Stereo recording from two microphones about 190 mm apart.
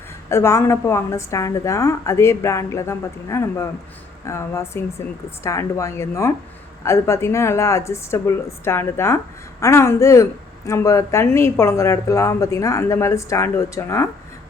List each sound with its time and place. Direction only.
0.3 s speech: 15° left (ahead or behind)